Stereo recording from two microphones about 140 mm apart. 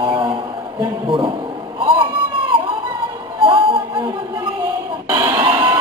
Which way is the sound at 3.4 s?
40° right (ahead or behind).